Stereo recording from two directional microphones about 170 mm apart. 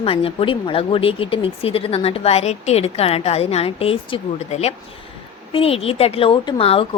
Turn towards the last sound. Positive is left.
turn(degrees=35)  # may be behind; listen again after turning